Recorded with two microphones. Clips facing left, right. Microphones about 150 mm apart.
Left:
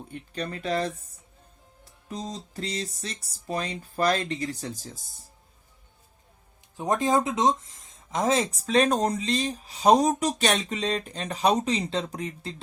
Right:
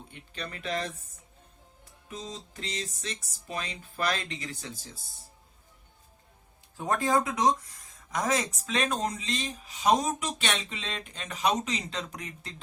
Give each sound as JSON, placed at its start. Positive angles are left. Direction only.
{"t": 0.1, "sound": "speech", "side_deg": 40}
{"t": 2.0, "sound": "speech", "side_deg": 40}
{"t": 6.7, "sound": "speech", "side_deg": 20}